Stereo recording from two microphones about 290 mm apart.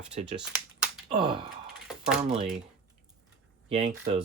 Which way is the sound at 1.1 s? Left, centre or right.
Centre.